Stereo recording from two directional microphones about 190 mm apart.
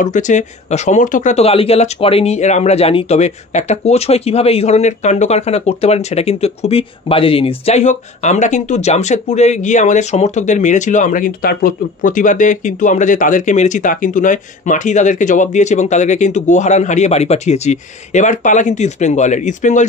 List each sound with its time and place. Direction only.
0.0 s speech: 40° left (ahead or behind)